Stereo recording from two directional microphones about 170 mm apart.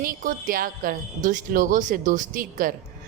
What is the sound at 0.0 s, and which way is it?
A woman's voice, 55° right (ahead or behind).